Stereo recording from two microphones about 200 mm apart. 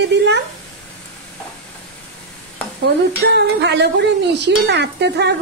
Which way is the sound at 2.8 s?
60° right (ahead or behind).